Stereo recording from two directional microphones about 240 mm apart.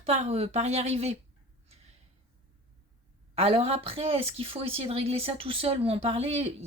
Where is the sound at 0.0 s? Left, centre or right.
Right.